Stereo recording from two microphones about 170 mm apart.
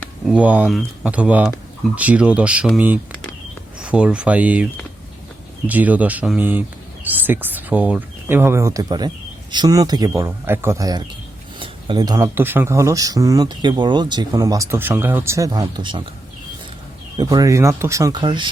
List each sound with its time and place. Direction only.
0.3 s speech: 10° right (ahead or behind); by 16.0 s 30° right (ahead or behind)
17.2 s speech: 20° right (ahead or behind)